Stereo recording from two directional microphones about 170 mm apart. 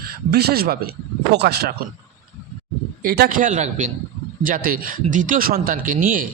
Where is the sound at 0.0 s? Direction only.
65° right (ahead or behind).